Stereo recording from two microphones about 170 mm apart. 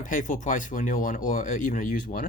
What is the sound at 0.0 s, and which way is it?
Speech, 50° left (ahead or behind).